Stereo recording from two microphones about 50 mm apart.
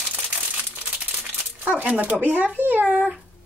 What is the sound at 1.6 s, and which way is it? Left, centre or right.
Speech, right.